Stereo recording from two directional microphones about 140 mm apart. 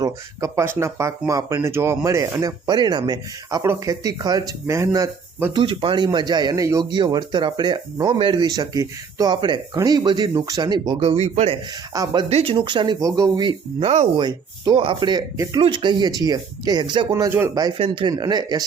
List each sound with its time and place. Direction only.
0.0 s speech: 20° right (ahead or behind)
5.6 s speech: 35° right (ahead or behind)
11.0 s speech: 50° right (ahead or behind)
11.9 s speech: 25° right (ahead or behind)
12.3 s speech: 45° right (ahead or behind)
12.5 s speech: 35° right (ahead or behind)
17.7 s speech: 35° right (ahead or behind)